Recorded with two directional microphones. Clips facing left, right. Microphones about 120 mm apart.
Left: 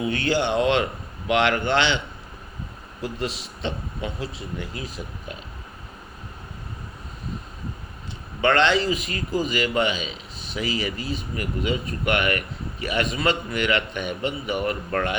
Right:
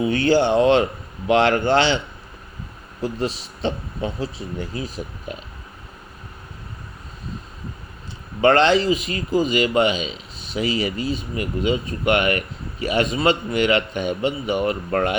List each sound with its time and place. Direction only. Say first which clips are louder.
0.0 s speech: right 6 dB; 30° right (ahead or behind)
3.0 s speech: right 5 dB; 30° right (ahead or behind)
8.4 s speech: right 4 dB; 35° right (ahead or behind)